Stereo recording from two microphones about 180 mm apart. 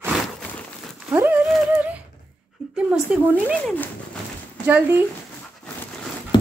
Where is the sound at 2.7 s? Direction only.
5° right (ahead or behind).